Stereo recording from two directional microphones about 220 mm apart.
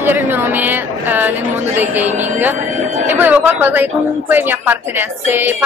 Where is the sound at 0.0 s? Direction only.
10° right (ahead or behind).